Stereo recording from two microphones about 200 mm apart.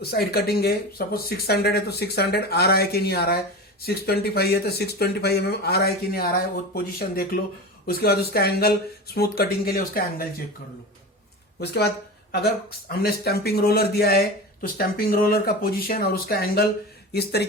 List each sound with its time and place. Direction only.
0.0 s speech: 50° left (ahead or behind)
11.6 s speech: 55° left (ahead or behind)
12.9 s speech: 50° left (ahead or behind)